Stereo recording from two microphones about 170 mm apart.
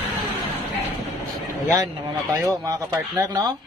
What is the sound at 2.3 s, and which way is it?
Speech, 20° right (ahead or behind).